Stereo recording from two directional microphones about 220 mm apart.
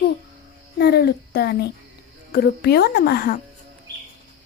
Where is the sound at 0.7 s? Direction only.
50° left (ahead or behind).